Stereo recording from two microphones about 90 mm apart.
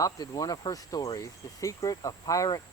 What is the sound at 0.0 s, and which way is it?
Speech, 40° left (ahead or behind).